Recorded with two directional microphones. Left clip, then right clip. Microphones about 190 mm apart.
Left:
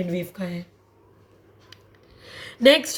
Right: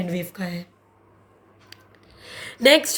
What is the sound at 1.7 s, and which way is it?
Rub, 40° right (ahead or behind).